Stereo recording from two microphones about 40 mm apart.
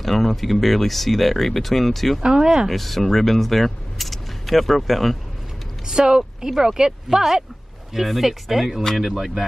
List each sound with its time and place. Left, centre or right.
0.0 s speech: centre
2.3 s speech: centre
2.7 s speech: centre
5.9 s speech: centre